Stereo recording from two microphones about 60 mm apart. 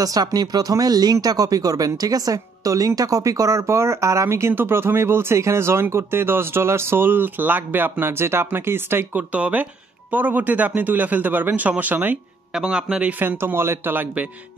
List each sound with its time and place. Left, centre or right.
0.0 s speech: right
3.6 s speech: right
8.0 s speech: right
9.1 s a man's voice: right
12.5 s a man's voice: centre
13.4 s speech: right